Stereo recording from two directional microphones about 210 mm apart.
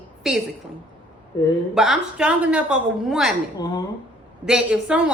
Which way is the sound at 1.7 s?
Centre (ahead or behind).